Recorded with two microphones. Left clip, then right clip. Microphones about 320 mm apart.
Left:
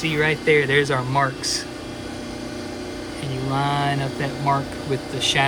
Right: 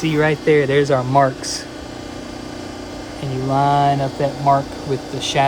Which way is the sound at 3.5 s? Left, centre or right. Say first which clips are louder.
Right 7 dB; centre.